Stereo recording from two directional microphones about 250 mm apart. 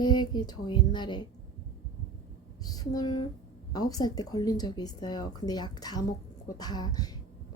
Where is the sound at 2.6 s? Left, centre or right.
Centre.